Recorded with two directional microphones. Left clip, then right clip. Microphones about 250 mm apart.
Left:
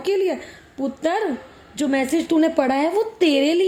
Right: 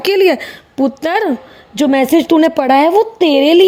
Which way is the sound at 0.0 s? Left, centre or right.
Right.